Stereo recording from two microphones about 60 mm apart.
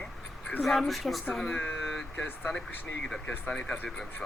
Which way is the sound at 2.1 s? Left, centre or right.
Left.